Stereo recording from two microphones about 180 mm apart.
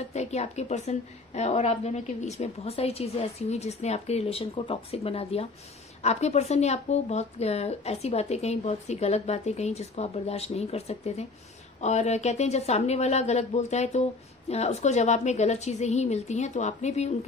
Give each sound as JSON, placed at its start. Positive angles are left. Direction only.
{"t": 0.1, "sound": "a woman's voice", "side_deg": 35}